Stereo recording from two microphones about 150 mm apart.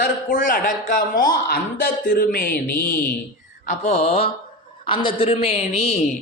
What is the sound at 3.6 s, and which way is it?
Mantra, 50° left (ahead or behind).